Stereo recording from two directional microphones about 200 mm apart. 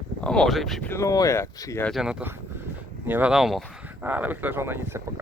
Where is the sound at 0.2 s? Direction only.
5° left (ahead or behind).